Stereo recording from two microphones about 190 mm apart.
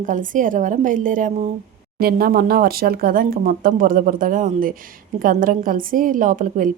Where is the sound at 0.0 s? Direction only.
45° right (ahead or behind).